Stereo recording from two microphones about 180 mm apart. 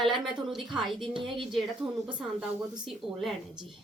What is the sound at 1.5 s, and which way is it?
Speech, centre (ahead or behind).